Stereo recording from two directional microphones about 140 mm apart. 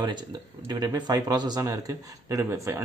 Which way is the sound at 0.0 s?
30° right (ahead or behind).